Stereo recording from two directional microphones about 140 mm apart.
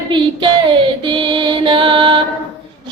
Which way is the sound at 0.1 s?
35° right (ahead or behind).